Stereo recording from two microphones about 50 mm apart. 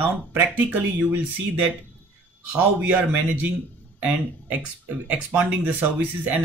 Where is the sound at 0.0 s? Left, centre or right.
Right.